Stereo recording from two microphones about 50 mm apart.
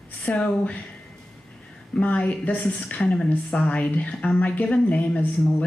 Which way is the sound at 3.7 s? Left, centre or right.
Left.